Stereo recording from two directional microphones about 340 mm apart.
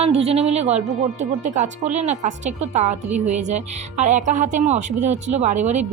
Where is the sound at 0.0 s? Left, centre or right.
Centre.